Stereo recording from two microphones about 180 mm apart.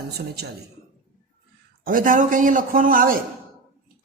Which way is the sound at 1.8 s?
50° right (ahead or behind).